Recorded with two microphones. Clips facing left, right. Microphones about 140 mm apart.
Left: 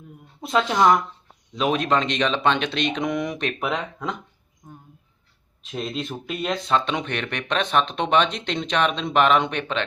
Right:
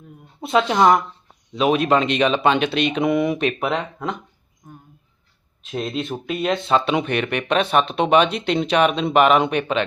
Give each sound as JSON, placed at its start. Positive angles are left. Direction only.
{"t": 0.4, "sound": "speech", "side_deg": 0}
{"t": 4.6, "sound": "speech", "side_deg": 20}
{"t": 5.6, "sound": "speech", "side_deg": 0}